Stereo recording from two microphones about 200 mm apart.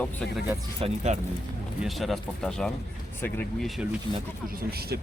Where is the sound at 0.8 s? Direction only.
35° right (ahead or behind).